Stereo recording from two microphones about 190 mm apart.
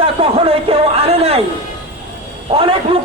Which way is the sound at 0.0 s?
30° right (ahead or behind).